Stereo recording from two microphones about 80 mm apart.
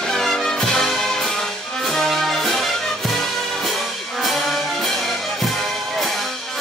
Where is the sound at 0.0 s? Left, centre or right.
Centre.